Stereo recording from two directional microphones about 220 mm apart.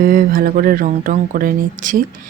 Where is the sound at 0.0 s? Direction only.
40° right (ahead or behind).